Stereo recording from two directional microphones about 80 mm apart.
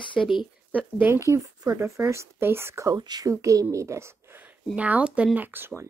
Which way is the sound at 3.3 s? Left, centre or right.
Right.